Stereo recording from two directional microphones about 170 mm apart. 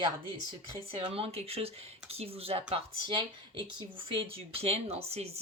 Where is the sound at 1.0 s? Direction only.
30° right (ahead or behind).